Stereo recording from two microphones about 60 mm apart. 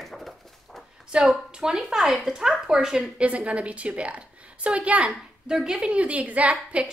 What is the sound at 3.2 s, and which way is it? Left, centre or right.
Speech, right.